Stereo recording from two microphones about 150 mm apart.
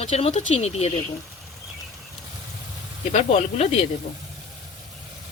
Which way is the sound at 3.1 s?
45° left (ahead or behind).